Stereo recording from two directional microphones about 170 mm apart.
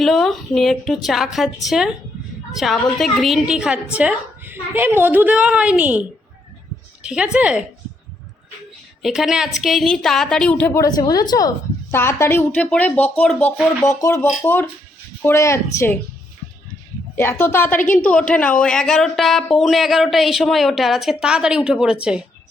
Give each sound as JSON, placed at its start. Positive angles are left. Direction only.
{"t": 0.0, "sound": "a woman's voice", "side_deg": 0}
{"t": 7.0, "sound": "a sound", "side_deg": -5}
{"t": 7.3, "sound": "a woman's voice", "side_deg": -5}
{"t": 9.0, "sound": "speech", "side_deg": 0}
{"t": 10.8, "sound": "a woman's voice", "side_deg": 25}
{"t": 17.2, "sound": "a woman's voice", "side_deg": 15}